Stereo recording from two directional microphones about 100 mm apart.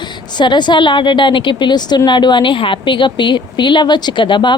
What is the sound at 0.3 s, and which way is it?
A woman's voice, 50° left (ahead or behind).